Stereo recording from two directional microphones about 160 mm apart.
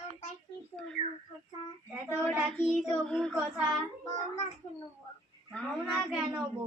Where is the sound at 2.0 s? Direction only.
5° right (ahead or behind).